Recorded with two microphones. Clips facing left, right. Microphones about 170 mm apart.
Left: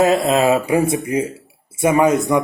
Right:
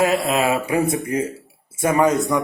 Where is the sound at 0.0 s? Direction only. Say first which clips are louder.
Left 4 dB; 30° left (ahead or behind).